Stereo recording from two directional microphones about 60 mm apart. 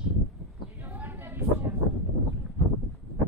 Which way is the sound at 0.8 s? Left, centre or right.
Right.